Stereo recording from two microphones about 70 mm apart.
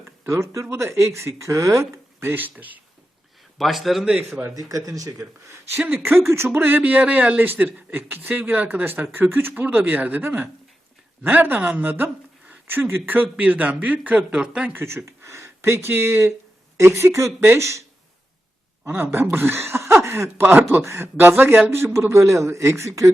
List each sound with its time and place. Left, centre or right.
0.0 s speech: right
2.2 s a man's voice: right
3.6 s speech: centre
4.5 s speech: right
6.1 s a man's voice: right
11.8 s a sound: right
12.8 s a man's voice: right
14.2 s speech: centre
14.7 s speech: right
19.1 s speech: right